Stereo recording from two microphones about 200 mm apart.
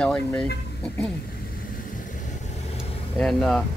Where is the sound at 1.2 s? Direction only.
45° left (ahead or behind); by 3.0 s 30° left (ahead or behind).